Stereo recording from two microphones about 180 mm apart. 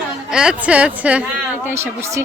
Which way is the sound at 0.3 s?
5° right (ahead or behind).